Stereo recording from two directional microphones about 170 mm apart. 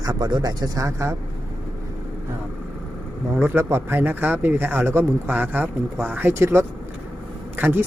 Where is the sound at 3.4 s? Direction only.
15° right (ahead or behind).